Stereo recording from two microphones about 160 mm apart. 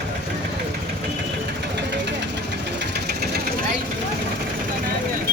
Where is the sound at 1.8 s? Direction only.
90° right.